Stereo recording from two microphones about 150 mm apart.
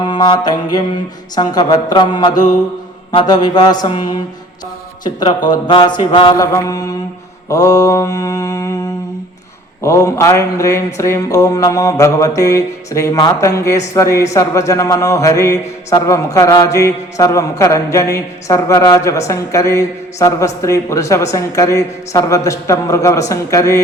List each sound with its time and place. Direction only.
0.1 s speech: 30° left (ahead or behind)
7.4 s mantra: 25° left (ahead or behind)
9.8 s speech: 20° left (ahead or behind)